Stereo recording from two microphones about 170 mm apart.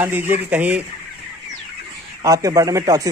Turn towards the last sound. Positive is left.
turn(degrees=-20)  # may be behind; listen again after turning